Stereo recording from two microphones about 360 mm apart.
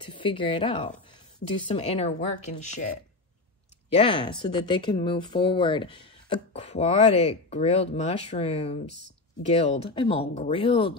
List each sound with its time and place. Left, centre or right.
0.1 s speech: centre
3.9 s speech: centre
9.8 s speech: centre